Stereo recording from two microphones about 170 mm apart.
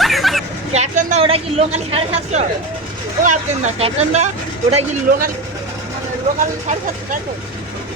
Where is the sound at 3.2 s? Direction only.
50° right (ahead or behind).